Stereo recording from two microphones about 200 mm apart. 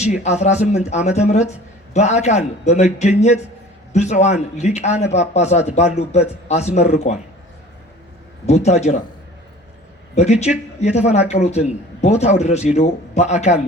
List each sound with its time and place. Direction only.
0.0 s a man's voice: 35° left (ahead or behind)
8.4 s a man's voice: 35° left (ahead or behind)
10.8 s a man's voice: 35° left (ahead or behind)